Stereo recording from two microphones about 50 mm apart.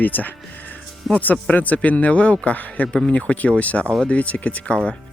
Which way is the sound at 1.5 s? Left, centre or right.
Left.